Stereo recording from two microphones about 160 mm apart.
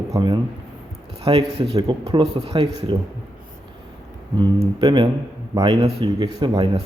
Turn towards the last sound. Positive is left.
turn(degrees=-30)  # may be behind; listen again after turning